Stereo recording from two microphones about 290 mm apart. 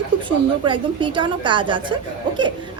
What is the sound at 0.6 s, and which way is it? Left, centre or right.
A woman's voice, centre.